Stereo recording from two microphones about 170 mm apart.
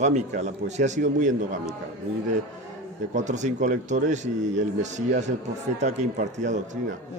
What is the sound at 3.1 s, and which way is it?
A man's voice, 45° right (ahead or behind).